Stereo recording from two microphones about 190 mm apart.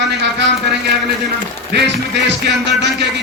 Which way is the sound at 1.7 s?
65° right (ahead or behind).